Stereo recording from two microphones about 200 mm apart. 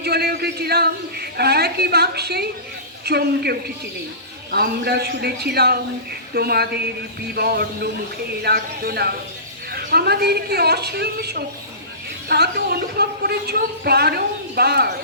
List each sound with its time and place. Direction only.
0.0 s a man's voice: 55° right (ahead or behind)